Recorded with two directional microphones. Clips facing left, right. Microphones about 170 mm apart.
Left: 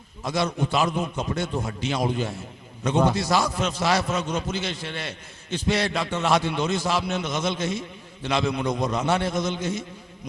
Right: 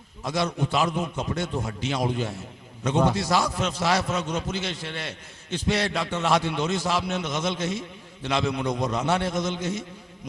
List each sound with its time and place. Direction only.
0.3 s a man's voice: 10° left (ahead or behind)
9.0 s a man's voice: 10° left (ahead or behind)